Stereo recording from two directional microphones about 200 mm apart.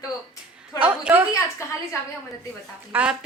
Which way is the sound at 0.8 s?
5° right (ahead or behind).